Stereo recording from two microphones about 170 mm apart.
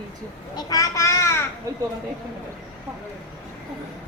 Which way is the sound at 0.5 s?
20° left (ahead or behind).